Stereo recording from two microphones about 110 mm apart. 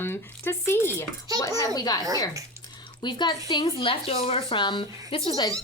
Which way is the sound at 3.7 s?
55° left (ahead or behind).